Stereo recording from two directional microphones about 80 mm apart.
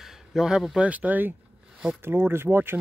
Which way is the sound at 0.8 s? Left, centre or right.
Centre.